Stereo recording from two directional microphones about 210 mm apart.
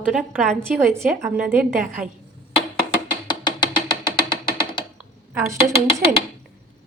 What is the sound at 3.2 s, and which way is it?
Music, 20° left (ahead or behind).